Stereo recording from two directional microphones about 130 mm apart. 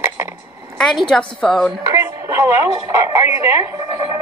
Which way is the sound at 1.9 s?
20° right (ahead or behind).